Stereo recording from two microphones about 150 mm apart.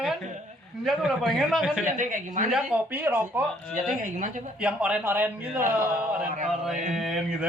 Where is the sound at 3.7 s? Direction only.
60° right (ahead or behind).